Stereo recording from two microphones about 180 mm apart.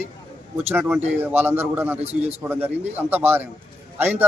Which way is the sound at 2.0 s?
35° right (ahead or behind).